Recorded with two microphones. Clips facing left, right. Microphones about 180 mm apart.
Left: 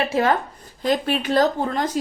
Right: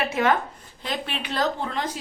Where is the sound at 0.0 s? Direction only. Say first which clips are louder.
Left 3 dB; 35° left (ahead or behind).